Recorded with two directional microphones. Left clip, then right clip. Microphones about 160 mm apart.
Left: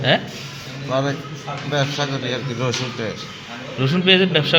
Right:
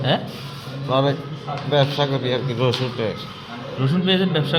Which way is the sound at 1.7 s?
20° right (ahead or behind).